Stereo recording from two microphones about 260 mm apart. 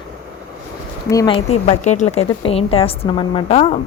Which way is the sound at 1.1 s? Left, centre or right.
Centre.